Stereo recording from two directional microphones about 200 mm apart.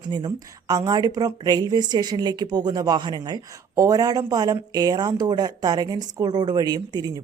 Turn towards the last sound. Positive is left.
turn(degrees=-20)  # may be behind; listen again after turning